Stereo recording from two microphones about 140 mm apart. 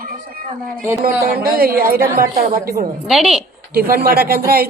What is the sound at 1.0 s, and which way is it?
A man's voice, 90° right.